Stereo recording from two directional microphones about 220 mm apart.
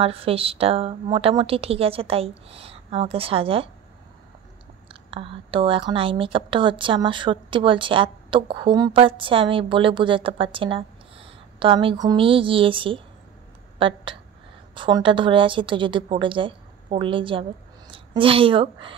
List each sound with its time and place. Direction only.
0.0 s a woman's voice: 25° right (ahead or behind)
4.8 s a woman's voice: 25° right (ahead or behind)